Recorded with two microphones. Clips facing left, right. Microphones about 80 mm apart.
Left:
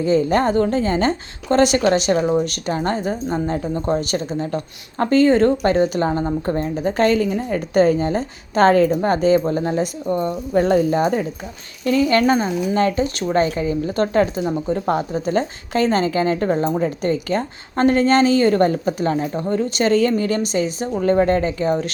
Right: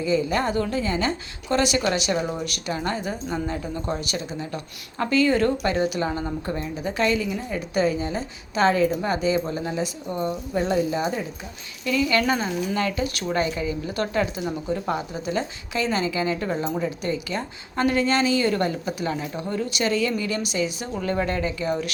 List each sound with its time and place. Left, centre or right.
0.0 s a woman's voice: left
11.9 s a woman's voice: left